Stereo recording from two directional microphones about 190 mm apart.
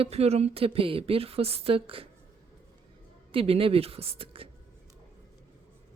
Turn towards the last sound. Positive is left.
turn(degrees=-30)  # may be behind; listen again after turning